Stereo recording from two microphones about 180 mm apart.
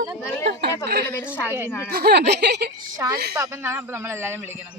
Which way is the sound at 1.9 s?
60° right (ahead or behind).